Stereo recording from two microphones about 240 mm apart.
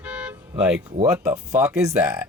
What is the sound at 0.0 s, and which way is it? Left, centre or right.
Toot, centre.